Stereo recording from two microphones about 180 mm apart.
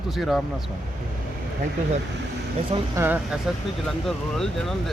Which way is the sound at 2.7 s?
35° right (ahead or behind).